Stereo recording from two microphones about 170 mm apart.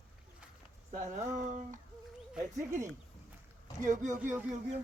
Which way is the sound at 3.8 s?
45° right (ahead or behind).